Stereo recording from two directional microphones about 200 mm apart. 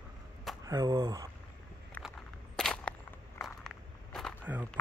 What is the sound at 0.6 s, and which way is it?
Speech, 20° right (ahead or behind).